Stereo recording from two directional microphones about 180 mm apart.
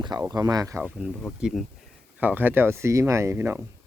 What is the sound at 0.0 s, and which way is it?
Speech, 20° right (ahead or behind).